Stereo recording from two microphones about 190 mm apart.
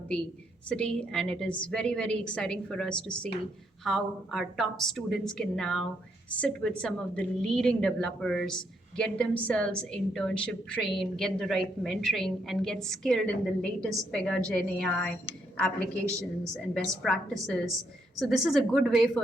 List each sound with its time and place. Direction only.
0.7 s a woman's voice: 5° left (ahead or behind)
16.1 s a woman's voice: 15° right (ahead or behind)
17.0 s a woman's voice: centre (ahead or behind)
17.7 s a woman's voice: 20° right (ahead or behind)
18.3 s a woman's voice: centre (ahead or behind)